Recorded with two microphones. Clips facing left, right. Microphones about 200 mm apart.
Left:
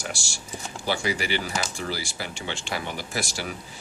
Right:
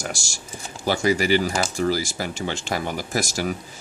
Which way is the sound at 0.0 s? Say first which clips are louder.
Right 3 dB; 45° right (ahead or behind).